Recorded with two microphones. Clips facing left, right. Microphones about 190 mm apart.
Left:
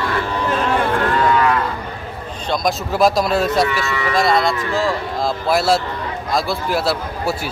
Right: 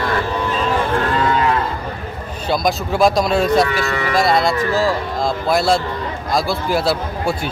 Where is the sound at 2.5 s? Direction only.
Centre (ahead or behind).